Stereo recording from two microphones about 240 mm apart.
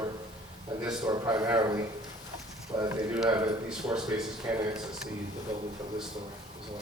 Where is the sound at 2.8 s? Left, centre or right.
Centre.